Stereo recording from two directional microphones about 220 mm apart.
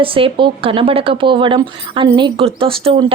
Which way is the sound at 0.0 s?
25° right (ahead or behind).